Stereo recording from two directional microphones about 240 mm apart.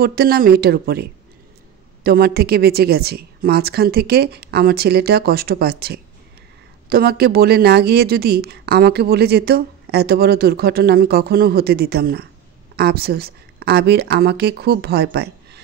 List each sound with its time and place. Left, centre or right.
0.0 s a woman's voice: right
2.0 s a woman's voice: right